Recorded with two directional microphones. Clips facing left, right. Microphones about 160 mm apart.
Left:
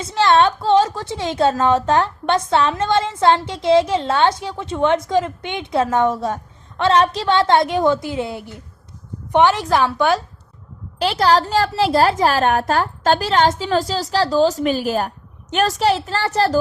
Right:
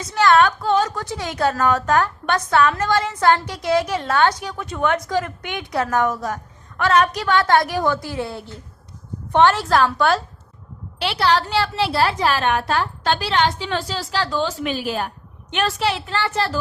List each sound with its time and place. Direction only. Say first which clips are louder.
0.0 s a woman's voice: left 1 dB; 25° left (ahead or behind)
11.0 s a woman's voice: left 3 dB; 40° left (ahead or behind)